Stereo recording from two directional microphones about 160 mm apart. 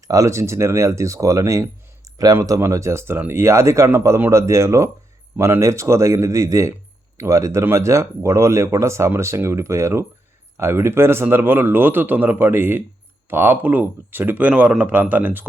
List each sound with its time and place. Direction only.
0.1 s speech: 20° right (ahead or behind)